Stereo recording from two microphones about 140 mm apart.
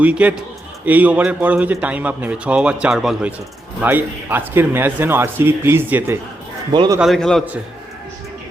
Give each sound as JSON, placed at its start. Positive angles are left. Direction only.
{"t": 0.0, "sound": "a man's voice", "side_deg": -10}
{"t": 6.7, "sound": "speech", "side_deg": -30}
{"t": 7.0, "sound": "a man's voice", "side_deg": 0}